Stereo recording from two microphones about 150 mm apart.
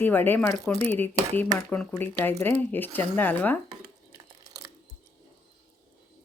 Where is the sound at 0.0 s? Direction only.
15° left (ahead or behind).